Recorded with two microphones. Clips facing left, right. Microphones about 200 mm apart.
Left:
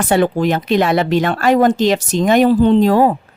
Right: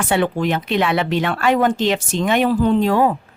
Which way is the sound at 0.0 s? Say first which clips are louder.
Left 4 dB; 40° left (ahead or behind).